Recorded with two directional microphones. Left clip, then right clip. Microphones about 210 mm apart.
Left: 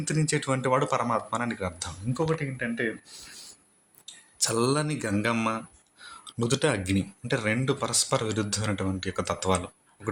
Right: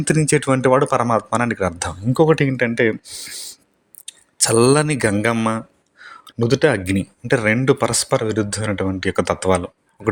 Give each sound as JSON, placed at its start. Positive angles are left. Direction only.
{"t": 0.0, "sound": "speech", "side_deg": -35}
{"t": 5.1, "sound": "speech", "side_deg": -30}